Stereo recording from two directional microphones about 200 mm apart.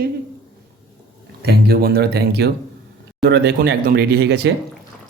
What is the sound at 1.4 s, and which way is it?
A capella, 50° right (ahead or behind).